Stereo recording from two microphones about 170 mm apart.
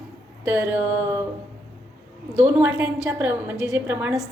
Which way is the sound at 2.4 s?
15° right (ahead or behind).